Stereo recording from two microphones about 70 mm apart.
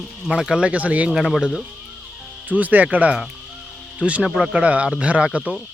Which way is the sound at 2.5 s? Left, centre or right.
Right.